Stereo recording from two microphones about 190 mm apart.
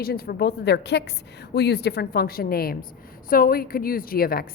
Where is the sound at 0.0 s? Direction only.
55° left (ahead or behind).